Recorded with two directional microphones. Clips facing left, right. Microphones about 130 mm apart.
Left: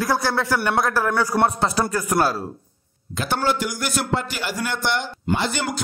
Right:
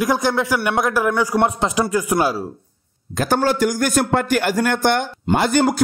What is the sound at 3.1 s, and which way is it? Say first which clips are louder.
A man's voice: right 5 dB; 45° right (ahead or behind).